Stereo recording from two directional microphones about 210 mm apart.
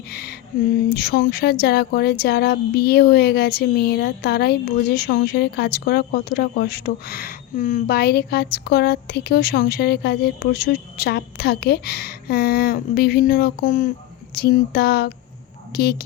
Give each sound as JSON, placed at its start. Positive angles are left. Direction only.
{"t": 0.1, "sound": "speech", "side_deg": 50}